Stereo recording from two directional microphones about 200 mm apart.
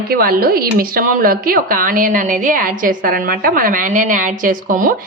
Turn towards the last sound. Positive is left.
turn(degrees=-40)  # may be behind; listen again after turning